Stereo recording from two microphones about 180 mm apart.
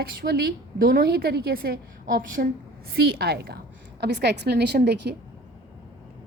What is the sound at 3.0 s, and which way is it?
A woman's voice, 60° right (ahead or behind).